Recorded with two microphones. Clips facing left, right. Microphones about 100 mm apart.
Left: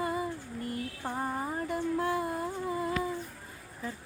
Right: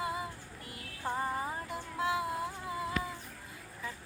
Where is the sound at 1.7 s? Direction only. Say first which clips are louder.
Left 6 dB; 50° left (ahead or behind).